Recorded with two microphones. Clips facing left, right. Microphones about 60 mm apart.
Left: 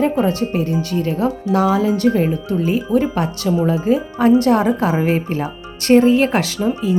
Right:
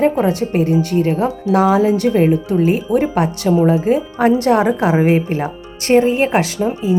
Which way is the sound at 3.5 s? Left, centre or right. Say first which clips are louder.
Right 3 dB; right.